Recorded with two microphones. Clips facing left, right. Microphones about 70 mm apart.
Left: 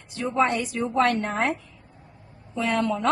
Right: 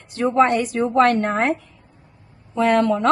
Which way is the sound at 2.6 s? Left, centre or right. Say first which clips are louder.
Right 7 dB; right.